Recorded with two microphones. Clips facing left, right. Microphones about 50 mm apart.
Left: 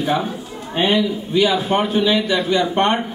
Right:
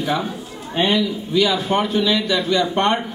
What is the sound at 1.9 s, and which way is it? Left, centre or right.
Speech, left.